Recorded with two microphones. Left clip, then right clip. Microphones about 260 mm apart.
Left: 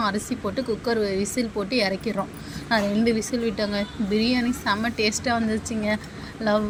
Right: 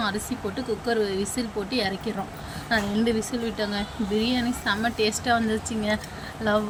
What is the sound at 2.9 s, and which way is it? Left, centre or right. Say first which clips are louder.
Speech: left 2 dB; right.